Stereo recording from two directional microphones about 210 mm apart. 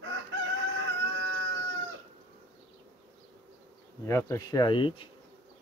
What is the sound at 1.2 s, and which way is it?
Cat, 60° right (ahead or behind).